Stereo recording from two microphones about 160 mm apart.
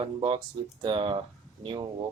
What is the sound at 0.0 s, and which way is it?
Speech, 30° right (ahead or behind).